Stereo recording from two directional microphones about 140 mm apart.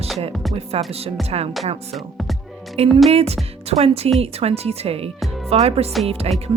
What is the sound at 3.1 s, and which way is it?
Speech, 45° right (ahead or behind).